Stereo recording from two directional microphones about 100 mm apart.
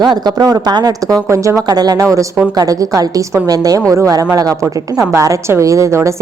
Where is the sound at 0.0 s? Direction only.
45° right (ahead or behind).